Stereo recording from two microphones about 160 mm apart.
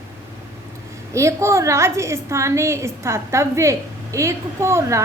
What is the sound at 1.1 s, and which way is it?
A woman's voice, 15° right (ahead or behind).